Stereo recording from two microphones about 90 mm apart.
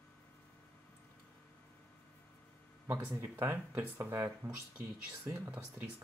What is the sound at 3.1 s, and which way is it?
Speech, 30° right (ahead or behind).